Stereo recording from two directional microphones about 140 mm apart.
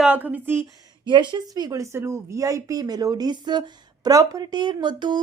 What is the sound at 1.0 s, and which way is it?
A woman's voice, 35° right (ahead or behind).